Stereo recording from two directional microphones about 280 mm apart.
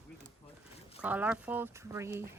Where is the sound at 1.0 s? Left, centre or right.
Centre.